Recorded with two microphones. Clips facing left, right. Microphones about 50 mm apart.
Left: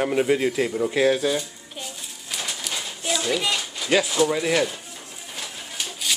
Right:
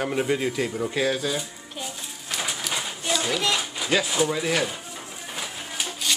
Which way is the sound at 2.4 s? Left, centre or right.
Centre.